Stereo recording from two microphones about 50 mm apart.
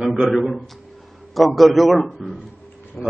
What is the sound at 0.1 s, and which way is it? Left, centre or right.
A man's voice, centre.